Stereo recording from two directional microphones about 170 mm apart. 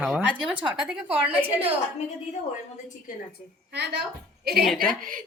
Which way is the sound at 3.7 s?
80° right.